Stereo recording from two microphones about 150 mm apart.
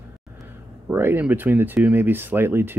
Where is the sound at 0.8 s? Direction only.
15° right (ahead or behind).